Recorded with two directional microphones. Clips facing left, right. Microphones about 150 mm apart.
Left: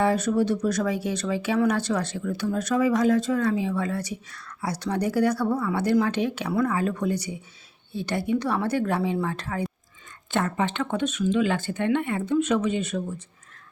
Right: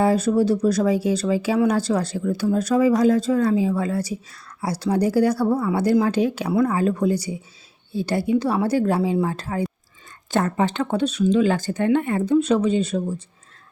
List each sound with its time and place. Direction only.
0.0 s speech: 35° right (ahead or behind)